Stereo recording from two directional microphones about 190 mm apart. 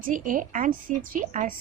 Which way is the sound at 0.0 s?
45° right (ahead or behind).